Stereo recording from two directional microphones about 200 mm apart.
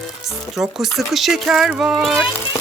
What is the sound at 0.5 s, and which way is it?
Speech, centre (ahead or behind).